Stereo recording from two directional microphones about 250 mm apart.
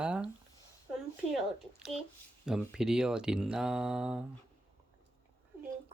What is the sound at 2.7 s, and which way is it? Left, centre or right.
Speech, centre.